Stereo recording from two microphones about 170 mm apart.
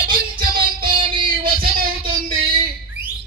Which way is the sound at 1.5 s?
60° right (ahead or behind).